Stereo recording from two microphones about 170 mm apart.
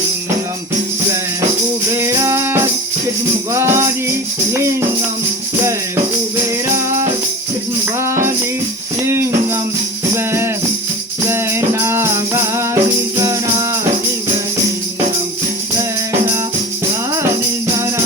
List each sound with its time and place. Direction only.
2.0 s music: 15° right (ahead or behind)
7.9 s music: 15° right (ahead or behind)